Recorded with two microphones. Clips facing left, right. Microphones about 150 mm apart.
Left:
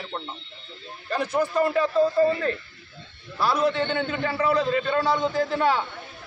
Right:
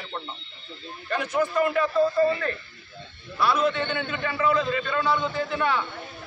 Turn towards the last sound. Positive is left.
turn(degrees=35)  # may be behind; listen again after turning